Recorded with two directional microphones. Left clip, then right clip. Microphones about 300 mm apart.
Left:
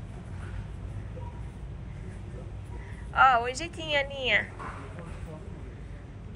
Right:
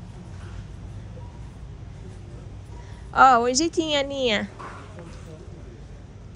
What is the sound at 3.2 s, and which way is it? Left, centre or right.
A woman's voice, right.